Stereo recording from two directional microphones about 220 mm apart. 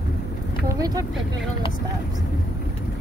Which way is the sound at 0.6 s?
15° right (ahead or behind).